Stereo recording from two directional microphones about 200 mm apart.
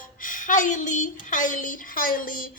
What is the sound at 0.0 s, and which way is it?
A woman's voice, 40° left (ahead or behind).